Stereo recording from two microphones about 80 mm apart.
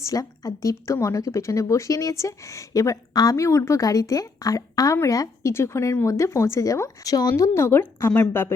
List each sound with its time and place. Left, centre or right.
0.0 s a woman's voice: left